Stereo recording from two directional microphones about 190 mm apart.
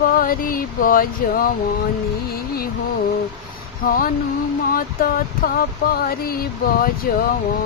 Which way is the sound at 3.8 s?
50° left (ahead or behind).